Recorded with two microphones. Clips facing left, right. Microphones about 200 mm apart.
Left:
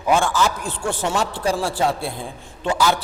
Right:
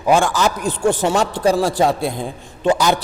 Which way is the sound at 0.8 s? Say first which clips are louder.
Right 8 dB; 40° right (ahead or behind).